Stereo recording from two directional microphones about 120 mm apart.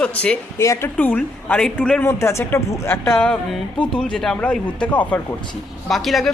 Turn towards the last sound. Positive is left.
turn(degrees=0)  # may be behind; listen again after turning